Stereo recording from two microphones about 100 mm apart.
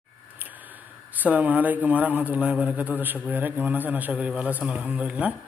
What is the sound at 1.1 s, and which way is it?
A man's voice, 15° right (ahead or behind).